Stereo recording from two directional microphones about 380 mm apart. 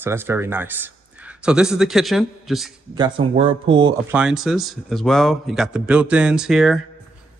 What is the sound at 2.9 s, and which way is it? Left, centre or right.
Speech, centre.